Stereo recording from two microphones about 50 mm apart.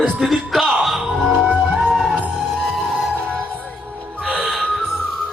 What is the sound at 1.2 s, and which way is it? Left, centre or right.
Music, centre.